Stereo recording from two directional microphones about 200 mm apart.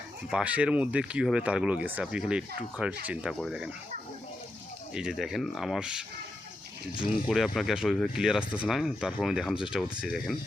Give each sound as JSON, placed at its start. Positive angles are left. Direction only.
{"t": 0.3, "sound": "speech", "side_deg": -5}
{"t": 4.9, "sound": "speech", "side_deg": 0}